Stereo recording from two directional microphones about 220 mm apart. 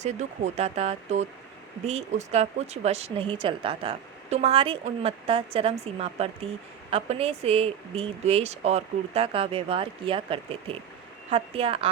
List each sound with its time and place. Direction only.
0.0 s speech: 30° right (ahead or behind)